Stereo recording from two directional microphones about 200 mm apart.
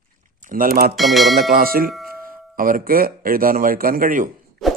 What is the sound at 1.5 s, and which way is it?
Speech, 45° right (ahead or behind).